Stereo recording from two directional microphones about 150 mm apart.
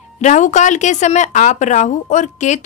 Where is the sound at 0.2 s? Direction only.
55° left (ahead or behind).